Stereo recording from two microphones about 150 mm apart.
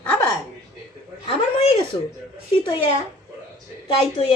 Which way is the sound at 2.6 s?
35° left (ahead or behind).